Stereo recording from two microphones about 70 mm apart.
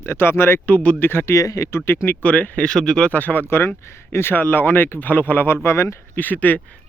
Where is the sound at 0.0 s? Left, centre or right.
Left.